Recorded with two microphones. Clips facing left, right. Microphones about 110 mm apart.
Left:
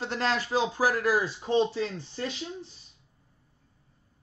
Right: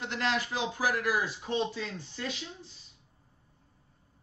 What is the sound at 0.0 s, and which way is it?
Speech, 35° left (ahead or behind).